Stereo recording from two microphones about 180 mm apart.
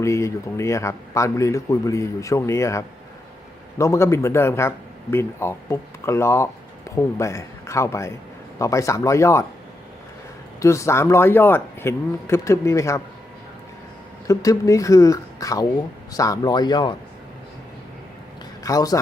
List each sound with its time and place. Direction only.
0.0 s a man's voice: 15° left (ahead or behind)
10.6 s a man's voice: 15° left (ahead or behind)
14.3 s speech: 20° left (ahead or behind)
18.6 s a man's voice: 20° left (ahead or behind)